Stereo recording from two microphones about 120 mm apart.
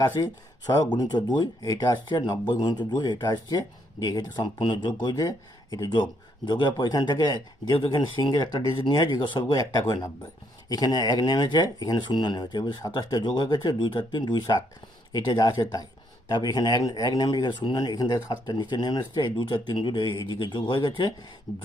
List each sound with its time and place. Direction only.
0.0 s speech: 35° left (ahead or behind)